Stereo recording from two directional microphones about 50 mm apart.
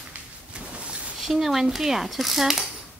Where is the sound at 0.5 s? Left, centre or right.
Right.